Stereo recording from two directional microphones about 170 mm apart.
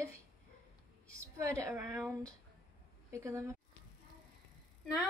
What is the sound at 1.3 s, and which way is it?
A woman's voice, 15° right (ahead or behind).